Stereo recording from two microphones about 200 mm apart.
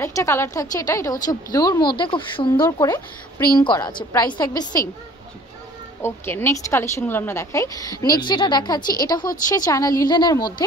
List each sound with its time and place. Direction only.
0.0 s a woman's voice: 15° left (ahead or behind)
6.0 s a woman's voice: 10° left (ahead or behind)